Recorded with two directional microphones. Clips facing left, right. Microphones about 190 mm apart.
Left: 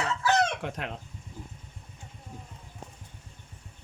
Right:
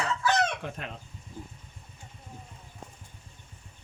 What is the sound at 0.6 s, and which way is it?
Speech, 90° left.